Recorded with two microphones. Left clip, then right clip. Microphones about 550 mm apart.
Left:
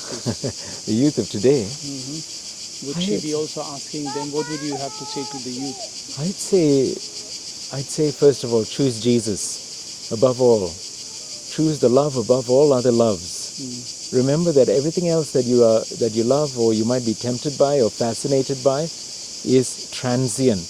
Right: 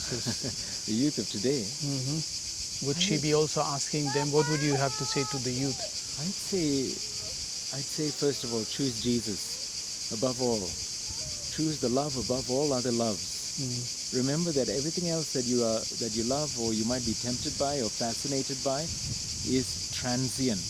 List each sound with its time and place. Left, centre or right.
0.9 s speech: left
3.0 s speech: right
6.6 s speech: left
7.9 s speech: centre
20.1 s speech: centre